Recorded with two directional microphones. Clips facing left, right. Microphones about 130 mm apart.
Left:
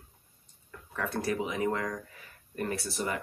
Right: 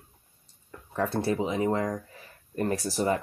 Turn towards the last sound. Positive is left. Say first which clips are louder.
# right 7 dB
turn(degrees=-35)  # may be behind; listen again after turning